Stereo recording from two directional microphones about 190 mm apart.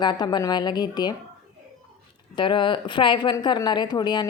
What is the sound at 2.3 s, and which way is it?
A woman's voice, 25° left (ahead or behind).